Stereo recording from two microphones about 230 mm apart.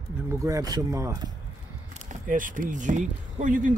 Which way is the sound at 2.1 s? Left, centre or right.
Right.